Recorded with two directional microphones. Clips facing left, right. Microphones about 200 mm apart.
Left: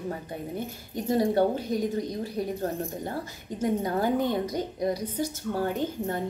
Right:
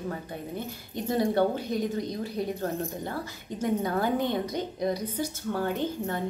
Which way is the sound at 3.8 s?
40° left (ahead or behind).